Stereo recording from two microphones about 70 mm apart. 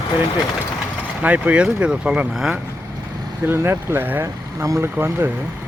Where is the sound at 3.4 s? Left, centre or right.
Right.